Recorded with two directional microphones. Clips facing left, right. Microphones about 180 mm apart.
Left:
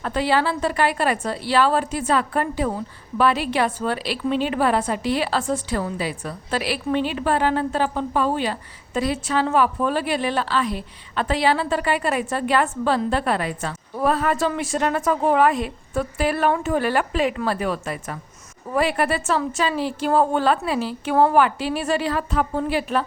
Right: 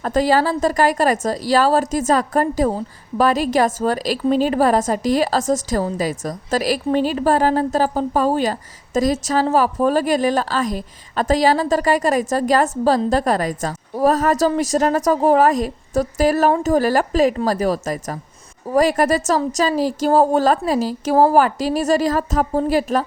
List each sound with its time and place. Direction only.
0.0 s a woman's voice: 40° right (ahead or behind)